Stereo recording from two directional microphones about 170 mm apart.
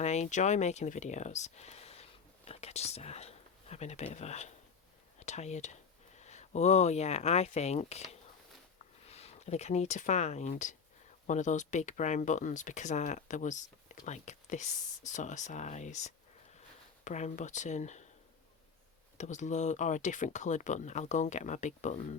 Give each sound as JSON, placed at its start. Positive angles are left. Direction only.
{"t": 0.0, "sound": "speech", "side_deg": 40}
{"t": 9.0, "sound": "speech", "side_deg": 40}
{"t": 19.1, "sound": "speech", "side_deg": 45}